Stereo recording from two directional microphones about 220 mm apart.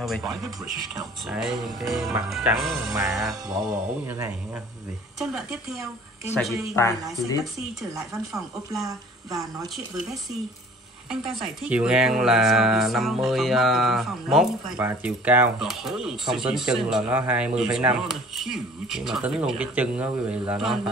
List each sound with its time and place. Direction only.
0.0 s speech: centre (ahead or behind)
5.2 s speech: centre (ahead or behind)
6.7 s speech: 15° left (ahead or behind)
7.9 s a woman's voice: 15° right (ahead or behind)
11.1 s speech: centre (ahead or behind)